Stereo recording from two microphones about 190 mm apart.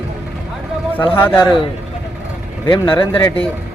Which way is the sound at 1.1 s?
15° left (ahead or behind).